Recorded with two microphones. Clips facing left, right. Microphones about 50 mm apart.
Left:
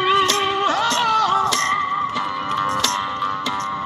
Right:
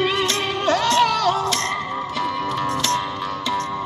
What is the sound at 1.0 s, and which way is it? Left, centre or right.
Music, left.